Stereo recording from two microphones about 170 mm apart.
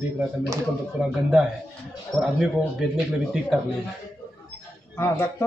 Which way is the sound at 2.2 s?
5° right (ahead or behind).